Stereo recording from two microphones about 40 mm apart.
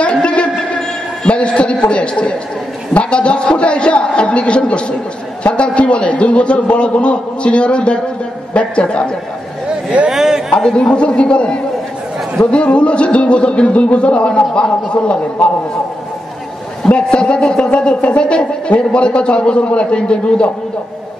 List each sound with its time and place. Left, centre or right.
0.0 s a sound: left
2.9 s a man's voice: left
10.0 s a sound: centre
10.6 s speech: centre
10.9 s speech: left
16.9 s speech: left
17.4 s speech: centre
18.2 s speech: left